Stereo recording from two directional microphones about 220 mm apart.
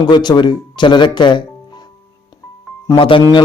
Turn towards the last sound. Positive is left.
turn(degrees=20)  # may be behind; listen again after turning